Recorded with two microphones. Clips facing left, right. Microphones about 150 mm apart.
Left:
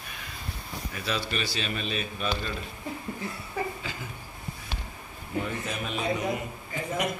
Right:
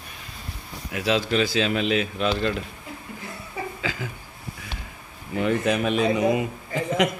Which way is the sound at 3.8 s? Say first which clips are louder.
Right 8 dB; 90° right.